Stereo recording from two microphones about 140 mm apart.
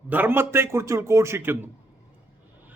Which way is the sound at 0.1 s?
15° right (ahead or behind).